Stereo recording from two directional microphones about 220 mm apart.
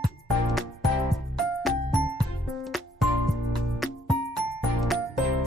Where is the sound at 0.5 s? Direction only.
Centre (ahead or behind).